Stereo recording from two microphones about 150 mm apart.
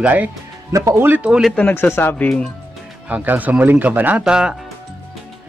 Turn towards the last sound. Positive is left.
turn(degrees=-5)  # may be behind; listen again after turning